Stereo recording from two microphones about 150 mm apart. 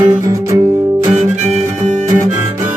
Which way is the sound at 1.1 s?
50° right (ahead or behind).